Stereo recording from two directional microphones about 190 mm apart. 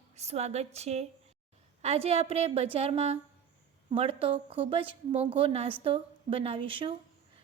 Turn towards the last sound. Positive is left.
turn(degrees=-25)  # may be behind; listen again after turning